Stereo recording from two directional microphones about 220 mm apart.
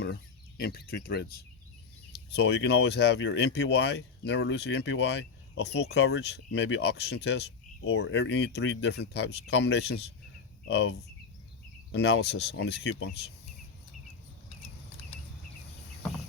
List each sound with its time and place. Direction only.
0.0 s speech: 45° left (ahead or behind)